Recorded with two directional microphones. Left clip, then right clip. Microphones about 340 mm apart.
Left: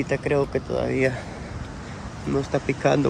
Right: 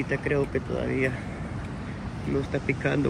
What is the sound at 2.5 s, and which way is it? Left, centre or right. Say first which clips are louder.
Speech: left 8 dB; centre.